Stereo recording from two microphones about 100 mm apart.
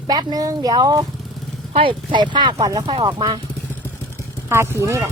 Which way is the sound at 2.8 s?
60° right (ahead or behind).